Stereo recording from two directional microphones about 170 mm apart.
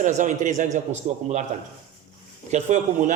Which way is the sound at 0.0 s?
45° right (ahead or behind).